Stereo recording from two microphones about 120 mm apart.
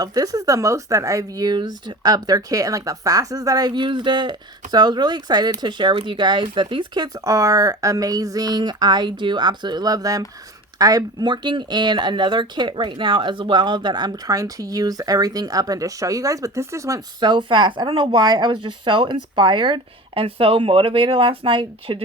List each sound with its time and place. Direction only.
0.0 s speech: 30° right (ahead or behind)
17.2 s speech: 40° right (ahead or behind)